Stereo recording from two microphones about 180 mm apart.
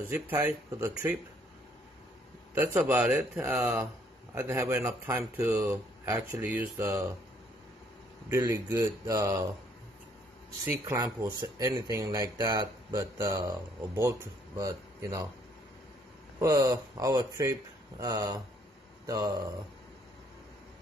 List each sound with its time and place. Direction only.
0.1 s speech: 15° right (ahead or behind)
2.5 s speech: 10° right (ahead or behind)
8.3 s speech: 15° right (ahead or behind)
10.6 s speech: 15° right (ahead or behind)
16.3 s speech: 20° right (ahead or behind)